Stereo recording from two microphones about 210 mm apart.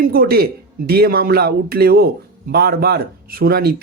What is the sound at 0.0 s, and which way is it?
A man's voice, 45° right (ahead or behind).